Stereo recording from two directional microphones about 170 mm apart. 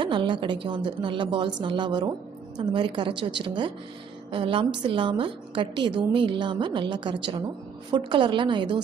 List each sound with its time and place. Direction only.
0.0 s a woman's voice: 30° right (ahead or behind)